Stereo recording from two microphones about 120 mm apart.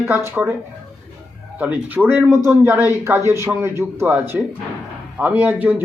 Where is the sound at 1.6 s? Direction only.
15° right (ahead or behind).